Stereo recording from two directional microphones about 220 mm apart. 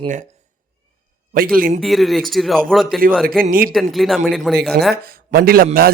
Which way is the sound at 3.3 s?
40° right (ahead or behind).